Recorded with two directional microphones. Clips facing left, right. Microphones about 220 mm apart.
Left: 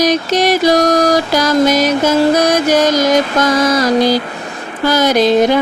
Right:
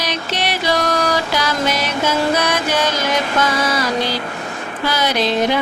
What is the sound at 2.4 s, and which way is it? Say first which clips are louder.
Mantra: left 7 dB; 40° left (ahead or behind).